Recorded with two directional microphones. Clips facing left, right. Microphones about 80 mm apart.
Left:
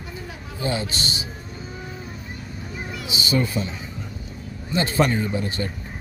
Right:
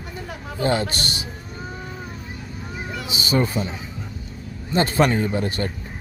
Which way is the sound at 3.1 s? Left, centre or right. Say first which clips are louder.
Right 2 dB; right.